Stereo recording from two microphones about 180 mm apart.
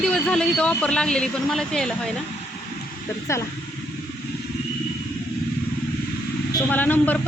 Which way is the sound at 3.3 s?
15° left (ahead or behind).